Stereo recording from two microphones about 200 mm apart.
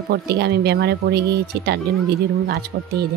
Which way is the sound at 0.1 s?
55° right (ahead or behind).